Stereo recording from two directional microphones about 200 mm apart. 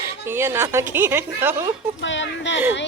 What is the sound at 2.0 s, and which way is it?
Speech, 65° left (ahead or behind).